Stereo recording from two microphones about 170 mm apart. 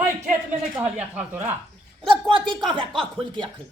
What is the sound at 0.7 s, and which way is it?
Speech, 10° right (ahead or behind).